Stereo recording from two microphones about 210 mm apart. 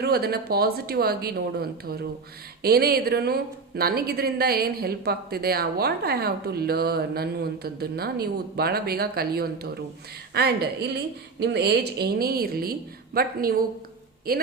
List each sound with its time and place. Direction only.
0.0 s a woman's voice: 50° right (ahead or behind)
14.3 s a woman's voice: 45° right (ahead or behind)